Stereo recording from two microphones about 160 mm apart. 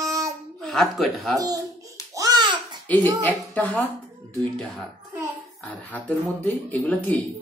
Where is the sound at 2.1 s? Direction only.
25° right (ahead or behind).